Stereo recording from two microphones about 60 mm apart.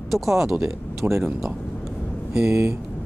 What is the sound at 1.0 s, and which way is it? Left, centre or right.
Speech, centre.